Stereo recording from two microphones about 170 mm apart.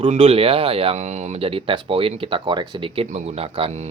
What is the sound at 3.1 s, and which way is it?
Speech, 40° right (ahead or behind).